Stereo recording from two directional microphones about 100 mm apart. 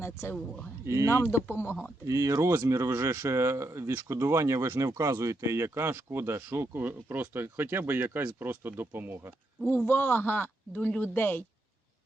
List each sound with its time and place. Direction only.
0.0 s speech: 25° left (ahead or behind)
0.9 s speech: 30° right (ahead or behind)
1.1 s speech: 25° left (ahead or behind)
2.0 s speech: 30° right (ahead or behind)
9.6 s speech: 20° left (ahead or behind)